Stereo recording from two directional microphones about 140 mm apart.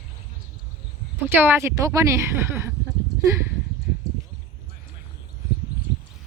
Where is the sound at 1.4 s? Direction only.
15° right (ahead or behind).